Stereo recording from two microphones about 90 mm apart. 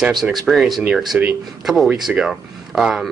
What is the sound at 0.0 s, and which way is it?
Speech, centre (ahead or behind).